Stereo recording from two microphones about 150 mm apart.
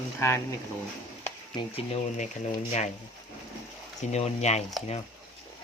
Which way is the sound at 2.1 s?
55° left (ahead or behind).